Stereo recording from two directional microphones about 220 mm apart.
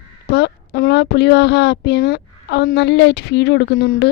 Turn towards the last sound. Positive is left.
turn(degrees=50)  # may be behind; listen again after turning